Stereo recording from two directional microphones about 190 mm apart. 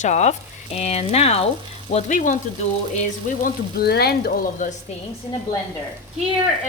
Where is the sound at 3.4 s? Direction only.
55° left (ahead or behind).